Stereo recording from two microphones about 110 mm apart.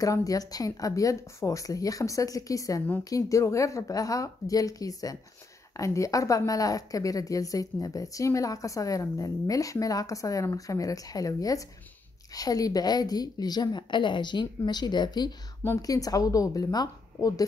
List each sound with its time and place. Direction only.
0.0 s a woman's voice: 30° left (ahead or behind)